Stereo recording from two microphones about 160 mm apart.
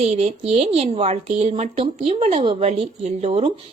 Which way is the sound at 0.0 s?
40° right (ahead or behind).